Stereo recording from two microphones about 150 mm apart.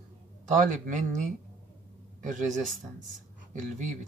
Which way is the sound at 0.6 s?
60° right (ahead or behind).